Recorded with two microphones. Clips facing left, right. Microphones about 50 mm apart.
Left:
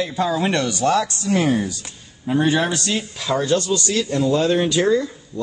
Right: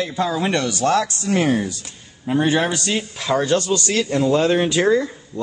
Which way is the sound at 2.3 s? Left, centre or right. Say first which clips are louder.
Even; centre.